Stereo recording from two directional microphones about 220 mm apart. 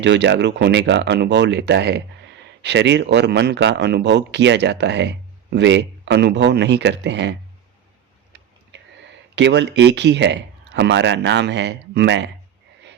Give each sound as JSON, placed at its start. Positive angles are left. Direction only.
{"t": 0.0, "sound": "speech", "side_deg": -55}
{"t": 8.3, "sound": "a sound", "side_deg": -50}
{"t": 9.3, "sound": "speech", "side_deg": -50}